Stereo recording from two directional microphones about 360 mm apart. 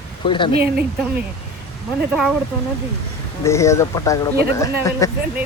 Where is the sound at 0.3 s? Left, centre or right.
Centre.